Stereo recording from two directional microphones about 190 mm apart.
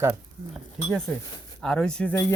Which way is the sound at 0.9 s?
Centre (ahead or behind).